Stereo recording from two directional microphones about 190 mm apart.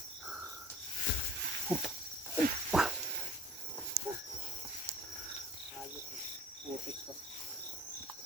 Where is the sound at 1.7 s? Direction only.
10° right (ahead or behind).